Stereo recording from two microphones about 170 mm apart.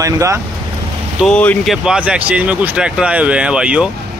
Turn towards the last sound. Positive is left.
turn(degrees=-5)  # may be behind; listen again after turning